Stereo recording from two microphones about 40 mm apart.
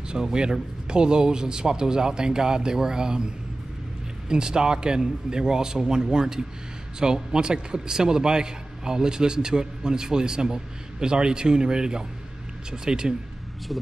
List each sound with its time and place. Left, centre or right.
0.1 s a man's voice: centre
4.3 s a man's voice: centre